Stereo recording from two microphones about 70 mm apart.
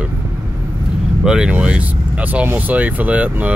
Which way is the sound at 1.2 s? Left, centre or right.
Centre.